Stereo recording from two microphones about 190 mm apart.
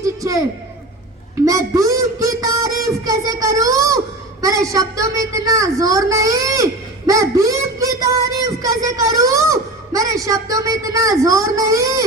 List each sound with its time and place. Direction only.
0.0 s a man's voice: 15° right (ahead or behind)
1.5 s speech: 15° right (ahead or behind)